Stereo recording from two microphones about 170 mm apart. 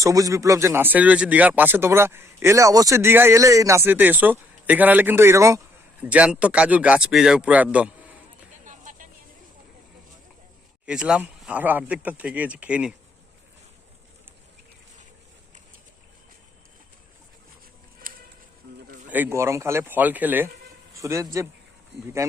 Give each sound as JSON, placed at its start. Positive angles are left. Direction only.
{"t": 0.0, "sound": "speech", "side_deg": -20}
{"t": 8.6, "sound": "a sound", "side_deg": -50}
{"t": 10.8, "sound": "speech", "side_deg": -5}
{"t": 18.0, "sound": "music", "side_deg": -55}
{"t": 19.1, "sound": "speech", "side_deg": -15}